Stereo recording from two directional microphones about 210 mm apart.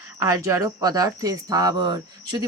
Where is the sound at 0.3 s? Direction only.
15° right (ahead or behind).